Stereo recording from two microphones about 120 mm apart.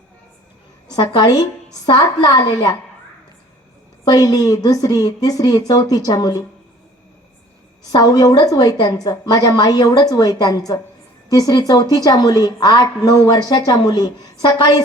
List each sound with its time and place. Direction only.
0.9 s a woman's voice: 35° left (ahead or behind)
4.0 s a woman's voice: 35° left (ahead or behind)
7.9 s a woman's voice: 30° left (ahead or behind)